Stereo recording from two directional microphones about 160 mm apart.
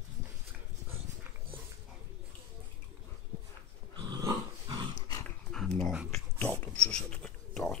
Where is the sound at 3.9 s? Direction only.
25° right (ahead or behind).